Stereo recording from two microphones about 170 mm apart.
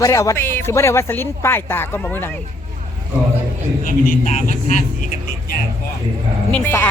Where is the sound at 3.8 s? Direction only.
50° left (ahead or behind).